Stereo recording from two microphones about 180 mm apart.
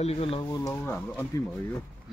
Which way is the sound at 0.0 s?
35° left (ahead or behind).